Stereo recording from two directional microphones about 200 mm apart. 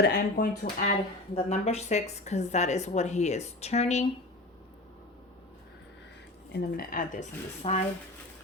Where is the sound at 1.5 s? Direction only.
30° left (ahead or behind).